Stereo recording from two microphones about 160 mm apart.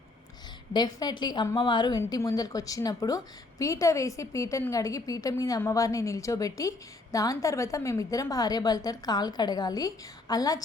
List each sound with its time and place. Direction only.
0.7 s a woman's voice: 25° left (ahead or behind)